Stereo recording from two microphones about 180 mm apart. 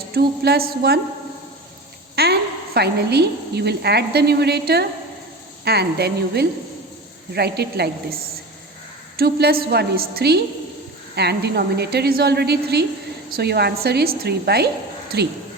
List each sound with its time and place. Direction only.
0.1 s a woman's voice: 60° right (ahead or behind)
2.2 s a sound: 60° right (ahead or behind)
2.7 s a woman's voice: 65° right (ahead or behind)
9.1 s a woman's voice: 60° right (ahead or behind)